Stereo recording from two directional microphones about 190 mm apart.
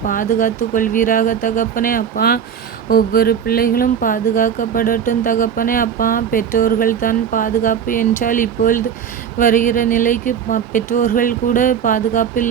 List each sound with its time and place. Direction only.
0.1 s speech: 45° left (ahead or behind)